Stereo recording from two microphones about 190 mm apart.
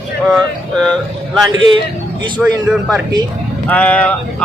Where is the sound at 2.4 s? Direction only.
5° right (ahead or behind).